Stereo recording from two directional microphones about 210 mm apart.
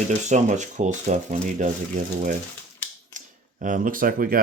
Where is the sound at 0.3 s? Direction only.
35° right (ahead or behind).